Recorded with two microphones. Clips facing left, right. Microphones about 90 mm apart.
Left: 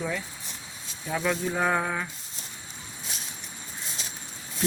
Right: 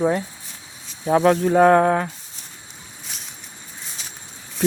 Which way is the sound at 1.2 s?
55° right (ahead or behind).